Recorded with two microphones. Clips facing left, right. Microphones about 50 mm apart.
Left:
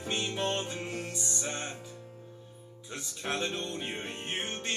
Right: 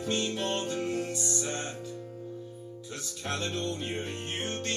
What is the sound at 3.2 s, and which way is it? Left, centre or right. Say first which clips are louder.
Music: even; centre.